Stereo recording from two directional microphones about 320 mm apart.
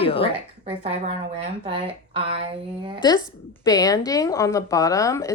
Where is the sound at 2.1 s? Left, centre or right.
Centre.